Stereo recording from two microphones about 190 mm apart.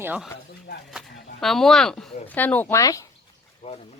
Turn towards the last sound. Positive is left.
turn(degrees=35)  # may be behind; listen again after turning